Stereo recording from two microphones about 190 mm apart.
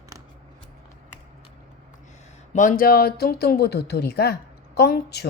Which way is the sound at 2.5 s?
40° left (ahead or behind).